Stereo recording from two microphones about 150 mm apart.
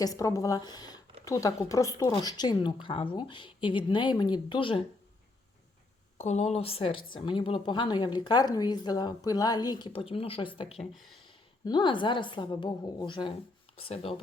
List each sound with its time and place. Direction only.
0.0 s a woman's voice: 20° left (ahead or behind)
6.1 s a woman's voice: 45° left (ahead or behind)
10.9 s speech: centre (ahead or behind)
11.6 s a woman's voice: 30° left (ahead or behind)